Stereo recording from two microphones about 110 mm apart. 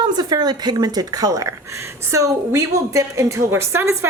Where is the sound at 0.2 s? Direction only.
40° right (ahead or behind).